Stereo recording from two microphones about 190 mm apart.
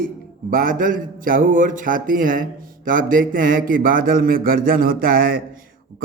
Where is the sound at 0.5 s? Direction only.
45° right (ahead or behind).